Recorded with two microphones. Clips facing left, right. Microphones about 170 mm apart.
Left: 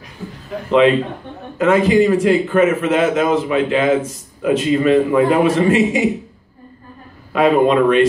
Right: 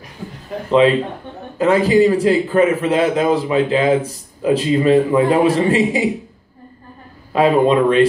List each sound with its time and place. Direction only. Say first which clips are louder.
0.7 s a man's voice: even; 35° right (ahead or behind)
7.3 s a man's voice: even; 30° right (ahead or behind)